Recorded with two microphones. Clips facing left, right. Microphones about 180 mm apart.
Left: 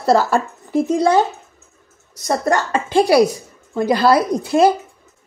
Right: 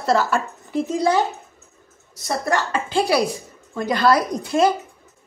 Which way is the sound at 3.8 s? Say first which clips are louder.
Left 4 dB; 30° left (ahead or behind).